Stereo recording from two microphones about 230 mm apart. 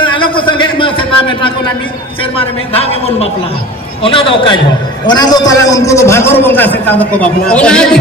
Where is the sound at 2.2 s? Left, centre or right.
Left.